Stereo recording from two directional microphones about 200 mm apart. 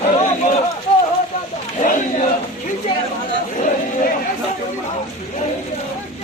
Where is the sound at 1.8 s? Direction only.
40° left (ahead or behind).